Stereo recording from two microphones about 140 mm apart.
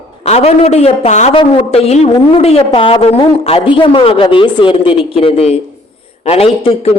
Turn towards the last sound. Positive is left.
turn(degrees=45)  # may be behind; listen again after turning